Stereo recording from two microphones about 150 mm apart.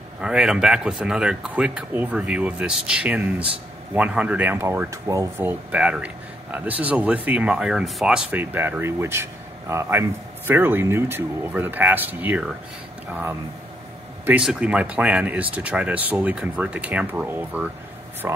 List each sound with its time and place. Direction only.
0.2 s speech: 5° right (ahead or behind)
14.2 s speech: 5° right (ahead or behind)